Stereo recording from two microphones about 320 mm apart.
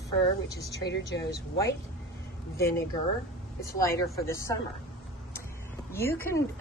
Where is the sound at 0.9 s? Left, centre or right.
Left.